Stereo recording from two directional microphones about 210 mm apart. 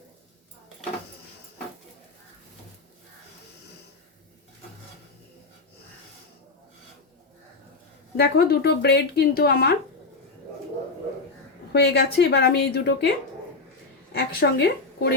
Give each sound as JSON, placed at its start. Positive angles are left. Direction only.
{"t": 8.1, "sound": "speech", "side_deg": 50}
{"t": 11.7, "sound": "speech", "side_deg": 50}
{"t": 14.1, "sound": "a woman's voice", "side_deg": 50}